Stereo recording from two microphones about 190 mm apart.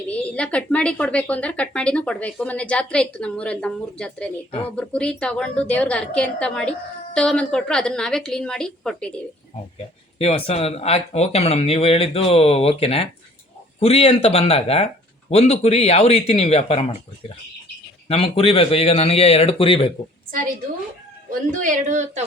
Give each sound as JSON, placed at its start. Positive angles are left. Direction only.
{"t": 0.1, "sound": "a woman's voice", "side_deg": 5}
{"t": 9.7, "sound": "speech", "side_deg": 30}
{"t": 21.2, "sound": "speech", "side_deg": -45}